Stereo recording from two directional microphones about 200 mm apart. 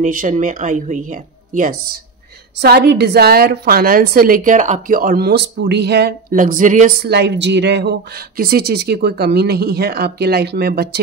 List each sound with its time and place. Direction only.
0.0 s a woman's voice: 40° right (ahead or behind)